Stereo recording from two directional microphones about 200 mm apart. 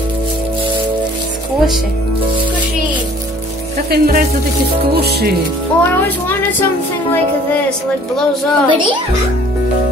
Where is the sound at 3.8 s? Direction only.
45° right (ahead or behind).